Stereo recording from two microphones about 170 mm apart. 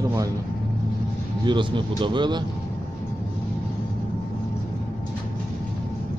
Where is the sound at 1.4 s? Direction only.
30° right (ahead or behind).